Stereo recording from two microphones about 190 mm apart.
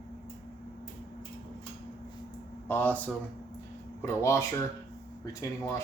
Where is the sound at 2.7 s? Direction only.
10° left (ahead or behind).